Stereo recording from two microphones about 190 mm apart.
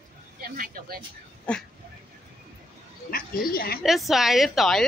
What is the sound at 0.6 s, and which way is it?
Speech, 50° right (ahead or behind).